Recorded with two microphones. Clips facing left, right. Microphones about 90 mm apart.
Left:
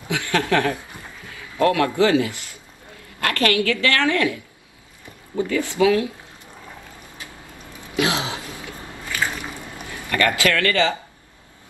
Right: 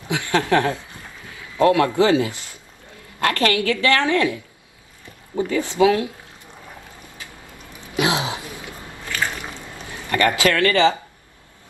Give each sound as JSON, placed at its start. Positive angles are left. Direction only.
{"t": 0.1, "sound": "a woman's voice", "side_deg": -20}
{"t": 5.5, "sound": "speech", "side_deg": -20}
{"t": 7.9, "sound": "a sound", "side_deg": -20}
{"t": 9.1, "sound": "water", "side_deg": 10}
{"t": 9.8, "sound": "speech", "side_deg": -25}